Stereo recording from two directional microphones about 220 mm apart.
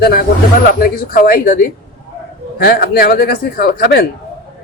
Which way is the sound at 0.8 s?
40° left (ahead or behind).